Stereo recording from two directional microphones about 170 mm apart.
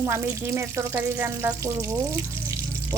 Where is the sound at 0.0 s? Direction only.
15° right (ahead or behind).